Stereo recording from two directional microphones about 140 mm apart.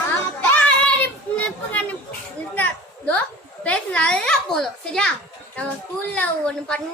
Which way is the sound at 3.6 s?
10° left (ahead or behind).